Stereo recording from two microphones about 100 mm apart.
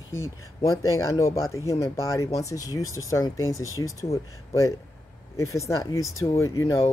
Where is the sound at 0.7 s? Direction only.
35° left (ahead or behind).